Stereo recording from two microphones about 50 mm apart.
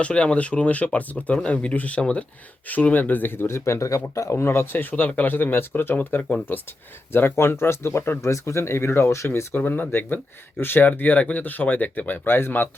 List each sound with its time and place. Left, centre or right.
0.0 s speech: left
4.1 s speech: left
8.2 s speech: left
9.6 s speech: left